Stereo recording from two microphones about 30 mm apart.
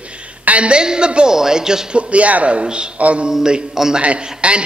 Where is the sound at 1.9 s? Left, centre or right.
Right.